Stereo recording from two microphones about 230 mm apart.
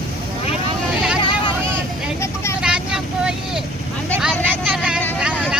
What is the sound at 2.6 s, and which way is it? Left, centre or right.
Vehicle, centre.